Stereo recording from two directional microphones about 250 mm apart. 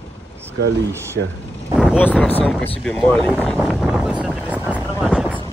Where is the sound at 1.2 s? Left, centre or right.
Right.